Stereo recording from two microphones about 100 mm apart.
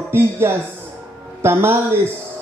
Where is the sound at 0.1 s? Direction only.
25° right (ahead or behind).